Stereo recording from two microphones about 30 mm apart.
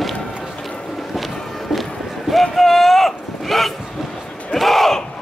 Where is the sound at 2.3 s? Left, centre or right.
Centre.